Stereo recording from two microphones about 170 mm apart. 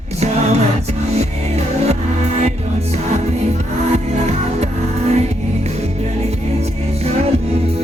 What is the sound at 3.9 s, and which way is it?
Music, 40° right (ahead or behind).